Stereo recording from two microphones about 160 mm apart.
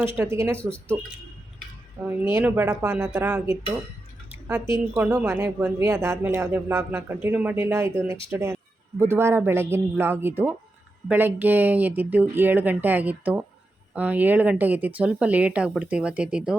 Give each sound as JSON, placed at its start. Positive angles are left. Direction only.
{"t": 0.2, "sound": "speech", "side_deg": -15}
{"t": 2.0, "sound": "speech", "side_deg": -15}
{"t": 3.1, "sound": "speech", "side_deg": -5}
{"t": 4.3, "sound": "drip", "side_deg": -10}
{"t": 4.9, "sound": "speech", "side_deg": -5}
{"t": 5.8, "sound": "speech", "side_deg": -20}